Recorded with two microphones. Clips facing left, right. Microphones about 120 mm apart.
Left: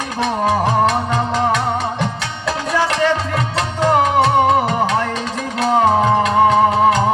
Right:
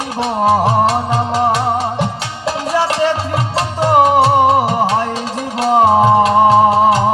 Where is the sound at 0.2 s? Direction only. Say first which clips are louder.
Right 4 dB; 35° right (ahead or behind).